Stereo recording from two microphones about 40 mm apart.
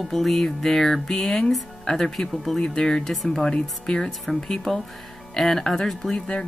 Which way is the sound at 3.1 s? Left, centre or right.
Centre.